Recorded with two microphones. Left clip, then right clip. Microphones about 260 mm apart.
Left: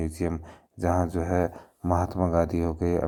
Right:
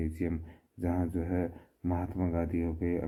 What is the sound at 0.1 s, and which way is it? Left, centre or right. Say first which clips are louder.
Speech: left 5 dB; centre.